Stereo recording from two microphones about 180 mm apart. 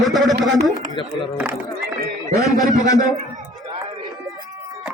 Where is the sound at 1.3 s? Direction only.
10° right (ahead or behind).